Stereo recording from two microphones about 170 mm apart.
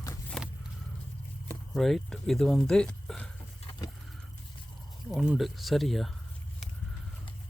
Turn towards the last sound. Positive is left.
turn(degrees=0)  # may be behind; listen again after turning